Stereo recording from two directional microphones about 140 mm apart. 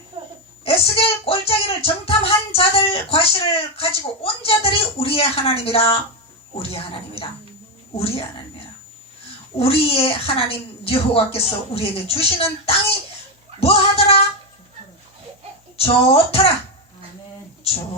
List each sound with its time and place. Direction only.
0.6 s speech: 45° left (ahead or behind)
13.6 s speech: 45° left (ahead or behind)
15.8 s speech: 45° left (ahead or behind)